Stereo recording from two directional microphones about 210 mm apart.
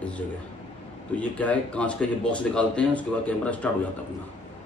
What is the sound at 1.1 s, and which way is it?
Speech, 5° left (ahead or behind).